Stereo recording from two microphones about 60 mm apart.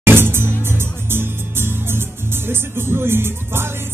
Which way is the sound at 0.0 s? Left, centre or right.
Right.